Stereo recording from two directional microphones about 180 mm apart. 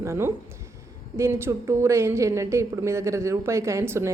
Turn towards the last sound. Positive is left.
turn(degrees=-15)  # may be behind; listen again after turning